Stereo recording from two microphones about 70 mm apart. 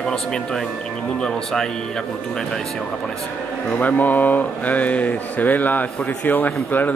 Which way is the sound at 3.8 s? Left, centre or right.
Left.